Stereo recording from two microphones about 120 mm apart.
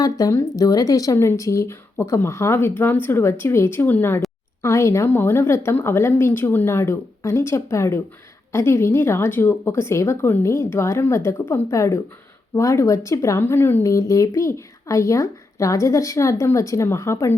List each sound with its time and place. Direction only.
0.0 s speech: 30° left (ahead or behind)